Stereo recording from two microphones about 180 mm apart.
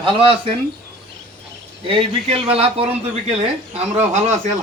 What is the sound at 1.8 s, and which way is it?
A man's voice, 30° right (ahead or behind).